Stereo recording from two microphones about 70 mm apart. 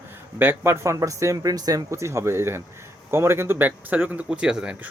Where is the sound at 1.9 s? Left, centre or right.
Right.